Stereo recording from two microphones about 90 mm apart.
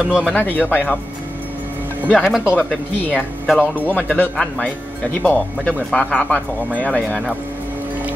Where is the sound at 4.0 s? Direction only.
20° left (ahead or behind).